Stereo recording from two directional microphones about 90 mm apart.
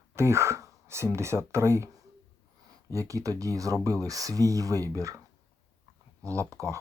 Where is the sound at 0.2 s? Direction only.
30° right (ahead or behind).